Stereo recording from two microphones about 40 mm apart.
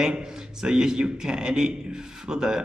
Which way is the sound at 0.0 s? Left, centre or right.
Centre.